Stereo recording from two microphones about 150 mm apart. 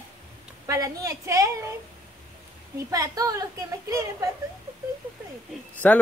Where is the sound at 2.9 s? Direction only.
25° right (ahead or behind).